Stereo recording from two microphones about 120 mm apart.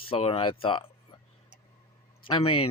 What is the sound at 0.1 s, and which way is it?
Speech, 50° left (ahead or behind).